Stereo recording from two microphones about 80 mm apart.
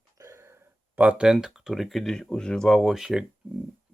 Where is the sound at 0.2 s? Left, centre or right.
Right.